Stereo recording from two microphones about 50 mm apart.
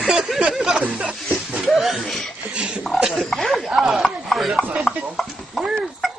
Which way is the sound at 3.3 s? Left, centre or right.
Centre.